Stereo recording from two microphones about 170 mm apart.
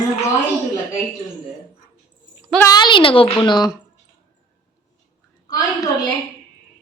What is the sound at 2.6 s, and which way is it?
A woman's voice, 25° left (ahead or behind).